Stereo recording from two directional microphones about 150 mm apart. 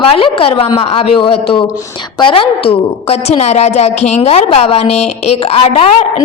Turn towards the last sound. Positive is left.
turn(degrees=45)  # may be behind; listen again after turning